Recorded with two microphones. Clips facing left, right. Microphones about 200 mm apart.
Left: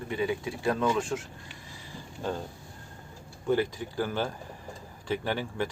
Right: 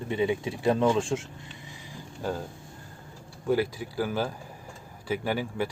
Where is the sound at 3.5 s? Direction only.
10° right (ahead or behind).